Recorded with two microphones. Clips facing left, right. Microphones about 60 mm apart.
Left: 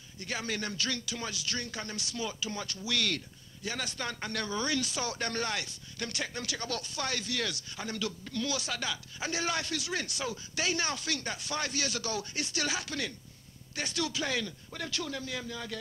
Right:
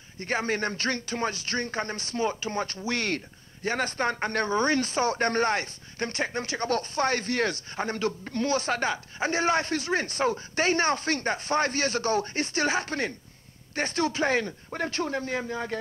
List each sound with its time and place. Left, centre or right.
0.2 s speech: right